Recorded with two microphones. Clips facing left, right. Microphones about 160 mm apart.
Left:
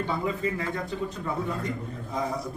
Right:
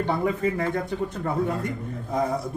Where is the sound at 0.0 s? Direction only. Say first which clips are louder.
Right 4 dB; 55° right (ahead or behind).